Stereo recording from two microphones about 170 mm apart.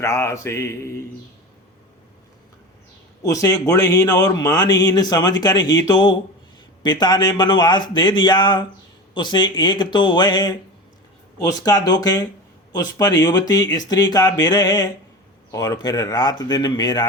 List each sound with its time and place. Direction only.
0.0 s mantra: 15° left (ahead or behind)
3.2 s speech: 20° left (ahead or behind)